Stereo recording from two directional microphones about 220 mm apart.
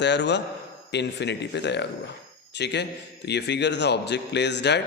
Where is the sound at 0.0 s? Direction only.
50° left (ahead or behind).